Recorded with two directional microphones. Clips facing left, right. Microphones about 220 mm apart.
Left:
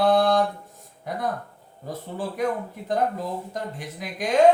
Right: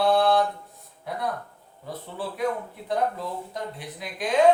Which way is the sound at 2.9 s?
45° left (ahead or behind).